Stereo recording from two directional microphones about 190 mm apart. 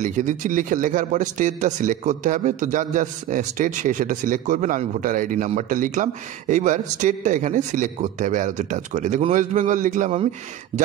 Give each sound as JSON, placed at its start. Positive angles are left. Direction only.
{"t": 0.0, "sound": "speech", "side_deg": -40}